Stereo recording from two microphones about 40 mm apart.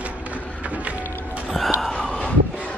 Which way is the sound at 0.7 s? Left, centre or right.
Right.